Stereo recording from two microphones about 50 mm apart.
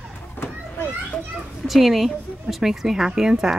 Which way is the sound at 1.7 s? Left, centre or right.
Centre.